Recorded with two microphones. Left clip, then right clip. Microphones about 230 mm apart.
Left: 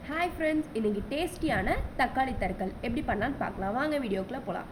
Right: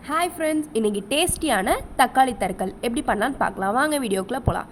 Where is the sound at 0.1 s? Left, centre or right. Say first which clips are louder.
Right 7 dB; right.